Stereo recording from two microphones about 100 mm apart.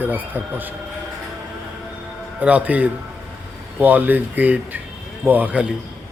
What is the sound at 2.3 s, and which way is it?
A man's voice, 15° right (ahead or behind).